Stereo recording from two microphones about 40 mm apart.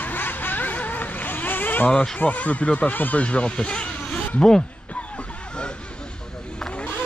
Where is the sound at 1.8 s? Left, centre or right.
Left; by 4.6 s centre.